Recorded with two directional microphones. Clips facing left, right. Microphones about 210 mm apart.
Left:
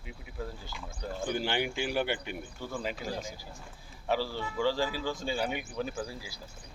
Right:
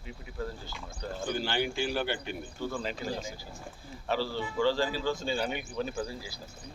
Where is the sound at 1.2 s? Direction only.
20° left (ahead or behind).